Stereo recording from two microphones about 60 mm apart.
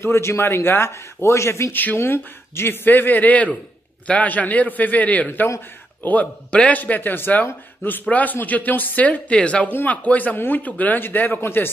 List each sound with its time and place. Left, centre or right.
0.0 s a man's voice: left
1.7 s a man's voice: left
9.7 s a man's voice: left